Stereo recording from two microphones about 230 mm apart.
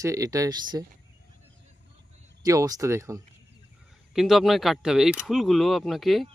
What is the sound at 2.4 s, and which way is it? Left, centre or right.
Speech, centre.